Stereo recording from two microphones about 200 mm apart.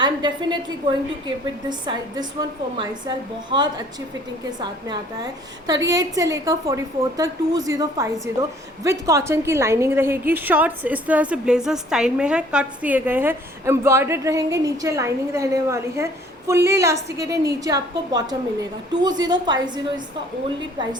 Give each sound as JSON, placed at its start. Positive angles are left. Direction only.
{"t": 0.0, "sound": "a woman's voice", "side_deg": -20}
{"t": 1.6, "sound": "a woman's voice", "side_deg": -20}
{"t": 3.5, "sound": "a woman's voice", "side_deg": -25}